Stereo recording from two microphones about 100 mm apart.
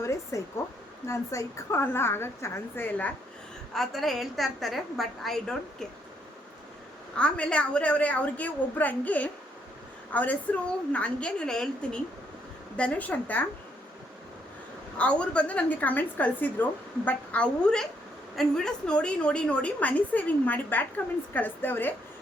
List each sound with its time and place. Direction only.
0.0 s a sound: 30° left (ahead or behind)
1.0 s a woman's voice: 30° left (ahead or behind)
3.8 s a woman's voice: centre (ahead or behind)
7.2 s a woman's voice: 10° left (ahead or behind)
14.9 s a woman's voice: 10° left (ahead or behind)